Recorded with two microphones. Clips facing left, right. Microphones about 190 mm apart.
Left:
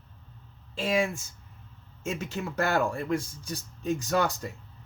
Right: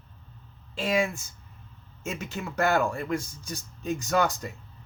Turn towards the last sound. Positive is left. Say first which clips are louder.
# right 1 dB
turn(degrees=30)  # may be behind; listen again after turning